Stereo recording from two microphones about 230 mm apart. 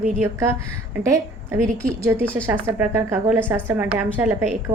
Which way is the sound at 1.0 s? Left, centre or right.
Centre.